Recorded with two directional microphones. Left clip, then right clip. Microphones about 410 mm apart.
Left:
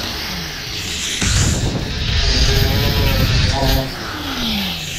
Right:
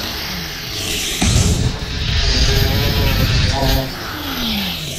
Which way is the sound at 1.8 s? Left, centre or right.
Centre.